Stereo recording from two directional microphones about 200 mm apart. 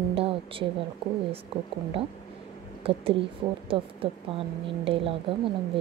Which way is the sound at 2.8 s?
30° right (ahead or behind).